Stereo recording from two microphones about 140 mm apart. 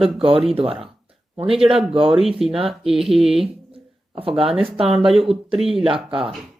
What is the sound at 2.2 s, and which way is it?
Speech, centre (ahead or behind).